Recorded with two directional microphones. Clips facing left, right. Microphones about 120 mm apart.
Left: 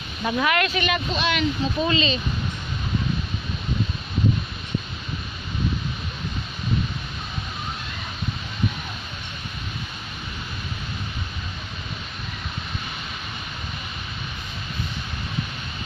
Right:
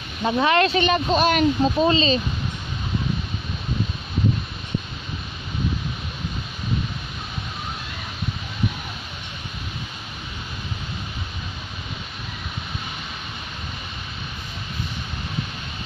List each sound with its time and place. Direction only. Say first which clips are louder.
0.2 s speech: right 4 dB; 25° right (ahead or behind); by 1.9 s 45° right (ahead or behind)
1.9 s speech: right 4 dB; 35° right (ahead or behind)